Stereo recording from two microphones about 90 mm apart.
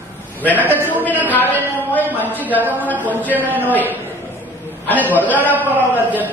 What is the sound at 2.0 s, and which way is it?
Speech, 20° right (ahead or behind).